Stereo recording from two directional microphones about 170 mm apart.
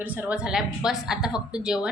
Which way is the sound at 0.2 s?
5° right (ahead or behind).